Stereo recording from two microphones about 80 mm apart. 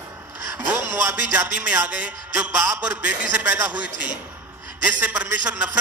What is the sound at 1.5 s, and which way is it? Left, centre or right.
A man's voice, centre.